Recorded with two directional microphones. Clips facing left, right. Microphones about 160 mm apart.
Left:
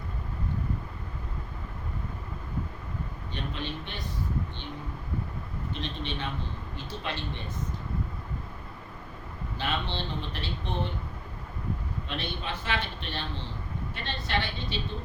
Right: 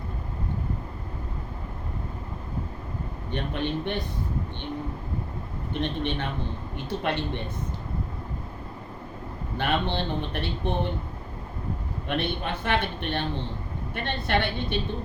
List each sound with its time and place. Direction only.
3.3 s a man's voice: 60° right (ahead or behind)
5.8 s a man's voice: 55° right (ahead or behind)
9.6 s a man's voice: 55° right (ahead or behind)
12.0 s a man's voice: 55° right (ahead or behind)